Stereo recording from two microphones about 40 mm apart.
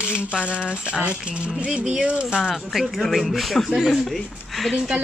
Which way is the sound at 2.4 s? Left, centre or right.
Centre.